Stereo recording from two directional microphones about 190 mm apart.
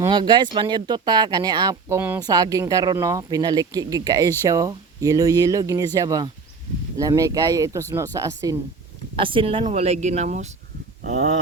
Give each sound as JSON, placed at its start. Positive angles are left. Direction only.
{"t": 0.0, "sound": "speech", "side_deg": -25}